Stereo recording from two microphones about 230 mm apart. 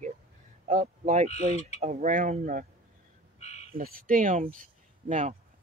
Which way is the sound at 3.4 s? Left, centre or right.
Left.